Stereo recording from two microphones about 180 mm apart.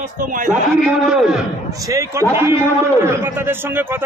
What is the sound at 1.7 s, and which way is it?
A man's voice, 20° right (ahead or behind).